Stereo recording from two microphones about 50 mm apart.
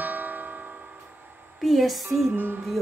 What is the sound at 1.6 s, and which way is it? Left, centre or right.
Speech, centre.